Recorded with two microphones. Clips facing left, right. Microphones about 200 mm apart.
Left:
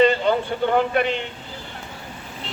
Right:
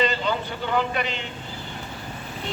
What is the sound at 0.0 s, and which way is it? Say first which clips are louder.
Speech: left 7 dB; 55° left (ahead or behind).